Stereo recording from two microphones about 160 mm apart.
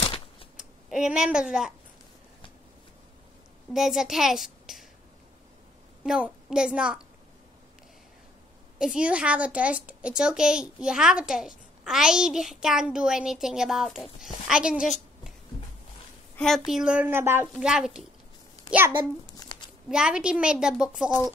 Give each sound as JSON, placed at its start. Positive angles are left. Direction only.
{"t": 0.6, "sound": "speech", "side_deg": -5}
{"t": 3.7, "sound": "a child's voice", "side_deg": -5}
{"t": 6.0, "sound": "a woman's voice", "side_deg": -5}
{"t": 8.7, "sound": "a woman's voice", "side_deg": -5}
{"t": 16.3, "sound": "a woman's voice", "side_deg": 0}
{"t": 17.6, "sound": "a woman's voice", "side_deg": -5}
{"t": 19.3, "sound": "a sound", "side_deg": 25}
{"t": 19.9, "sound": "a woman's voice", "side_deg": -5}